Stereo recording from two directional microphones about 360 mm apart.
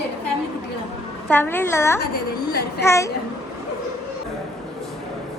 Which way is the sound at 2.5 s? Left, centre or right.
Left.